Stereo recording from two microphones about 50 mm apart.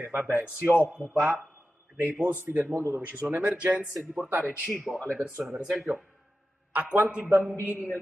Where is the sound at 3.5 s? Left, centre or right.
Right.